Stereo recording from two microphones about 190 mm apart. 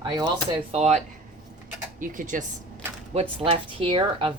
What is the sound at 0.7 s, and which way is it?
Speech, 35° right (ahead or behind).